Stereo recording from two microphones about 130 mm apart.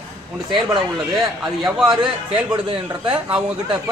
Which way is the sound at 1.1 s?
5° right (ahead or behind).